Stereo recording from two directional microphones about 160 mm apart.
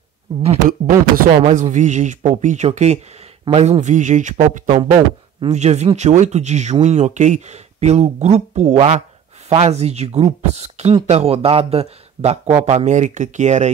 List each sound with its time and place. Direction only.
0.7 s speech: 60° right (ahead or behind)
1.3 s speech: 50° right (ahead or behind)
8.7 s speech: 35° right (ahead or behind)